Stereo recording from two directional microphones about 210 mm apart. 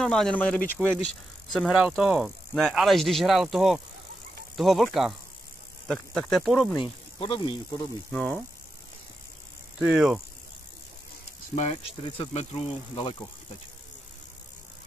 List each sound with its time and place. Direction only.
0.0 s speech: 5° left (ahead or behind)
6.8 s speech: 25° left (ahead or behind)
8.1 s speech: 5° left (ahead or behind)
9.8 s speech: 5° right (ahead or behind)
12.2 s speech: 30° left (ahead or behind)